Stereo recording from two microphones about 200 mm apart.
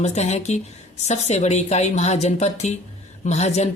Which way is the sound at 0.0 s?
35° left (ahead or behind).